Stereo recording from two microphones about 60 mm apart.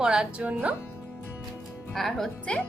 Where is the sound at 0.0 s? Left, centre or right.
Centre.